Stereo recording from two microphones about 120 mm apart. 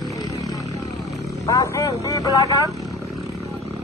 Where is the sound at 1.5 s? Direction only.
30° left (ahead or behind).